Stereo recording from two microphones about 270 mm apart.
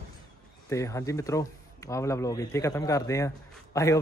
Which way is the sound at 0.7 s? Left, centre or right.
Centre.